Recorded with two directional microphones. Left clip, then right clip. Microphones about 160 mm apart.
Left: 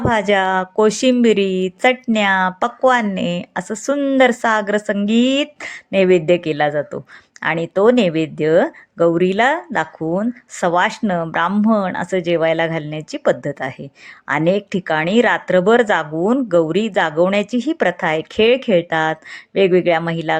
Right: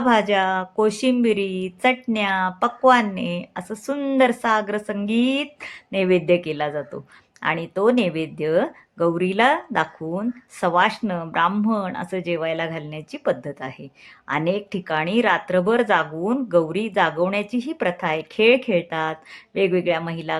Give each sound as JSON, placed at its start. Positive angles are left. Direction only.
{"t": 0.0, "sound": "speech", "side_deg": 35}